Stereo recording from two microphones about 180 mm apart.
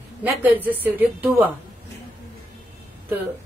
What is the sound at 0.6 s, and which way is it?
Speech, 10° right (ahead or behind).